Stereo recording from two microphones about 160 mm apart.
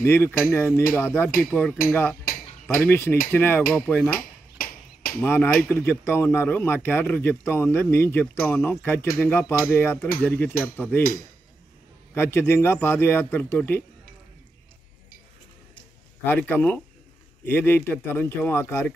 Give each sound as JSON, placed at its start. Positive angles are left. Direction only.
{"t": 0.0, "sound": "speech", "side_deg": 15}
{"t": 4.6, "sound": "a sound", "side_deg": 60}
{"t": 5.2, "sound": "speech", "side_deg": 15}
{"t": 12.1, "sound": "speech", "side_deg": 15}
{"t": 16.3, "sound": "speech", "side_deg": 10}